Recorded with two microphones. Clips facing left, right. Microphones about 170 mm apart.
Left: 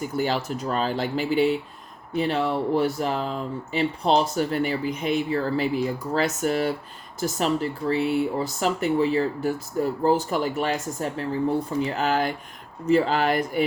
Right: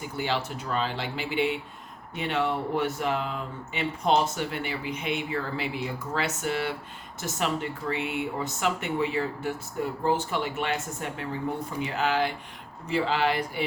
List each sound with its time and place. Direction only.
0.0 s speech: 40° left (ahead or behind)